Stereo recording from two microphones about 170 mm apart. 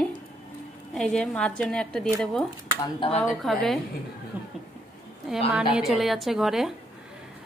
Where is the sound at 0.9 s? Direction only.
5° left (ahead or behind).